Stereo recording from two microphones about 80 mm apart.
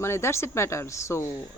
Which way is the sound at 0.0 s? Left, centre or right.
Left.